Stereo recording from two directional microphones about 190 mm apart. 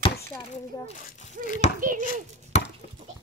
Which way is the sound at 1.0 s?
40° left (ahead or behind).